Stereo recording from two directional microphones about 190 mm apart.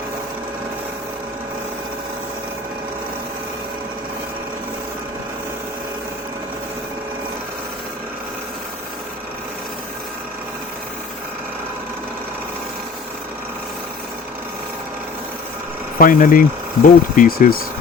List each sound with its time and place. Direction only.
16.0 s speech: 45° left (ahead or behind)